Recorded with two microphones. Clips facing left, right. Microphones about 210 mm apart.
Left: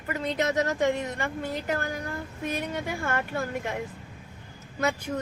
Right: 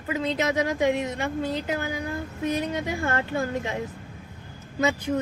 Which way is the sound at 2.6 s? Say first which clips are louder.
Right 4 dB; 20° right (ahead or behind).